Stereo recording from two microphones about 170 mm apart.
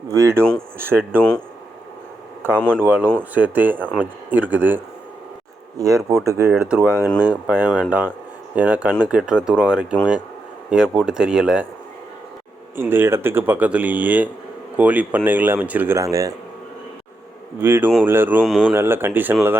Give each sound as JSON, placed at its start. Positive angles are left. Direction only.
{"t": 0.1, "sound": "speech", "side_deg": -15}
{"t": 2.8, "sound": "speech", "side_deg": -10}
{"t": 12.7, "sound": "speech", "side_deg": -15}
{"t": 17.6, "sound": "speech", "side_deg": -10}
{"t": 18.4, "sound": "speech", "side_deg": 0}
{"t": 18.7, "sound": "speech", "side_deg": -15}